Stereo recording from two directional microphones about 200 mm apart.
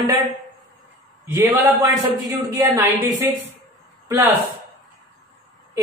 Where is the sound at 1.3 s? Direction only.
20° right (ahead or behind).